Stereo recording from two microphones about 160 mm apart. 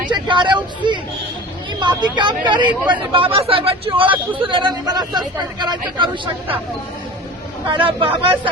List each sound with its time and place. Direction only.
0.1 s speech: 30° right (ahead or behind)
7.7 s speech: 30° right (ahead or behind)